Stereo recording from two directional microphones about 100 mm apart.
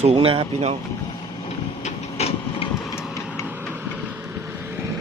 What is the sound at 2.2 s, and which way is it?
Train, 90° left.